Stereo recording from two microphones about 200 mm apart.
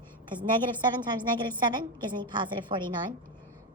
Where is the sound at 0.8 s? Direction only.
20° right (ahead or behind).